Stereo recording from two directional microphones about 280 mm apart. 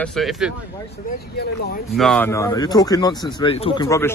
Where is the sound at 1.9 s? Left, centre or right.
Centre.